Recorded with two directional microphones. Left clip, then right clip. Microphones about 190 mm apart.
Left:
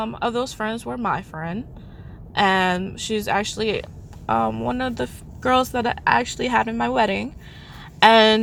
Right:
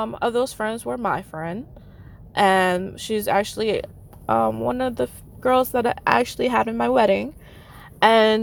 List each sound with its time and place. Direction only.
0.0 s speech: 30° right (ahead or behind)
4.3 s a woman's voice: 20° right (ahead or behind)